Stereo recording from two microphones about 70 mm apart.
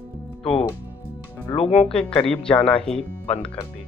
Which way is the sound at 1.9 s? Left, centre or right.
Centre.